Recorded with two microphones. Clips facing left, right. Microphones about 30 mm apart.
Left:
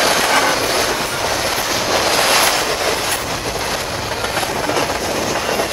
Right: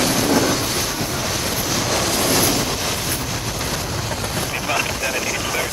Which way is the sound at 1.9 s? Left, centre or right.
Left.